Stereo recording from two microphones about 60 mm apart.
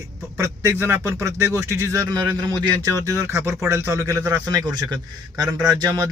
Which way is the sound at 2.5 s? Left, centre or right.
Right.